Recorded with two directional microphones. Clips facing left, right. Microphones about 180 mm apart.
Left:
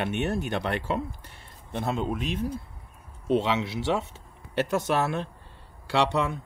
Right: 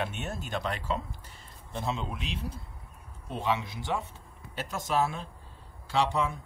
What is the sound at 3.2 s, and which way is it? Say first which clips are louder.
Speech: left 7 dB; 75° left (ahead or behind).